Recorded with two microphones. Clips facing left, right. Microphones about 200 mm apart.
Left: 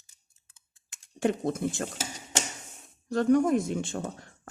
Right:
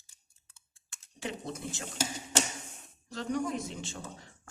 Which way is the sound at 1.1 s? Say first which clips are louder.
Left 11 dB; 50° left (ahead or behind).